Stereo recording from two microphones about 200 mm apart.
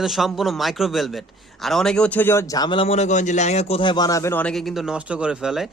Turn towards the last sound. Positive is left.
turn(degrees=-5)  # may be behind; listen again after turning